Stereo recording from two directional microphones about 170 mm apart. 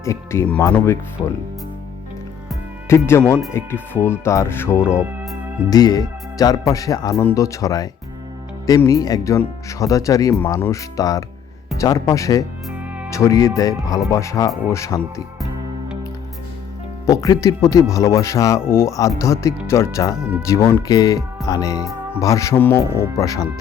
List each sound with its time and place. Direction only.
0.0 s speech: 15° left (ahead or behind)
2.9 s speech: 15° left (ahead or behind)
4.9 s speech: 5° right (ahead or behind)
5.7 s speech: 20° left (ahead or behind)
17.1 s speech: 20° left (ahead or behind)